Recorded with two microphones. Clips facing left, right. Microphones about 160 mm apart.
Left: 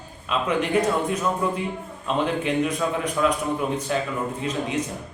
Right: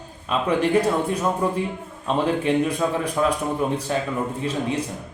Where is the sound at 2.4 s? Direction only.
35° right (ahead or behind).